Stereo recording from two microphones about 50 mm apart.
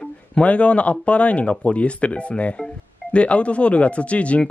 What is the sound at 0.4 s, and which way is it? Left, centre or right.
Speech, left.